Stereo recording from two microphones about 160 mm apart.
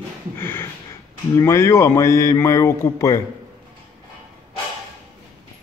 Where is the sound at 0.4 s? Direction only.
15° left (ahead or behind).